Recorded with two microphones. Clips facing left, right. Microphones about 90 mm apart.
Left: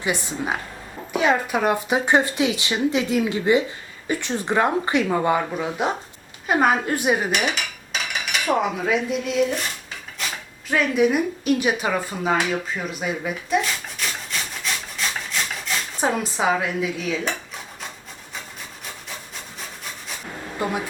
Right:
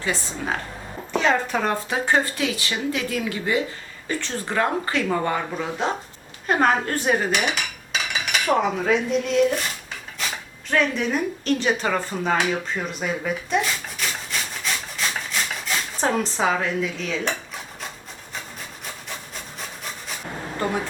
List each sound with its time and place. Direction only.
0.0 s speech: 15° left (ahead or behind)
7.3 s cutlery: centre (ahead or behind)
10.2 s a sound: centre (ahead or behind)